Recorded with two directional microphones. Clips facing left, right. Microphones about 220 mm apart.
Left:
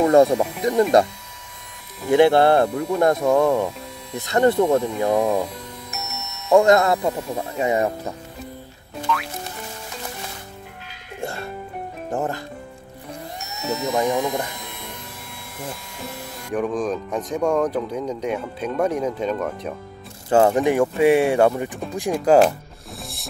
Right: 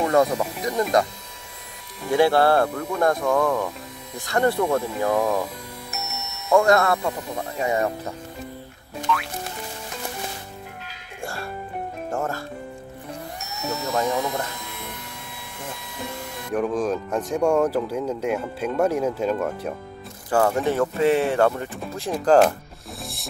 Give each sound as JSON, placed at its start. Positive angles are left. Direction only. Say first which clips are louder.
{"t": 0.0, "sound": "speech", "louder": "left 5 dB", "side_deg": 30}
{"t": 2.0, "sound": "speech", "louder": "left 3 dB", "side_deg": 20}
{"t": 5.9, "sound": "music", "louder": "right 2 dB", "side_deg": 0}
{"t": 6.5, "sound": "speech", "louder": "left 3 dB", "side_deg": 20}
{"t": 9.1, "sound": "music", "louder": "even", "side_deg": 0}
{"t": 11.1, "sound": "music", "louder": "left 3 dB", "side_deg": 20}
{"t": 12.1, "sound": "speech", "louder": "left 3 dB", "side_deg": 20}
{"t": 13.7, "sound": "speech", "louder": "left 3 dB", "side_deg": 15}
{"t": 16.4, "sound": "speech", "louder": "even", "side_deg": -5}
{"t": 20.2, "sound": "speech", "louder": "left 4 dB", "side_deg": 20}